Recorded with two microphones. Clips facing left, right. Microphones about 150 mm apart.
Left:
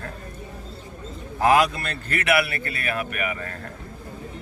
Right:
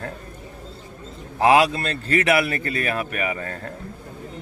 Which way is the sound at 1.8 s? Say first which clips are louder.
Right 6 dB; 35° right (ahead or behind).